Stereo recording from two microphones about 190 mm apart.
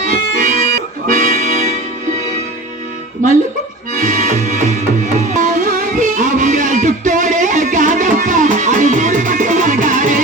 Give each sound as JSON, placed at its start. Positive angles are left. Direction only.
{"t": 0.0, "sound": "music", "side_deg": -45}
{"t": 4.0, "sound": "accordion", "side_deg": -45}
{"t": 5.1, "sound": "music", "side_deg": -40}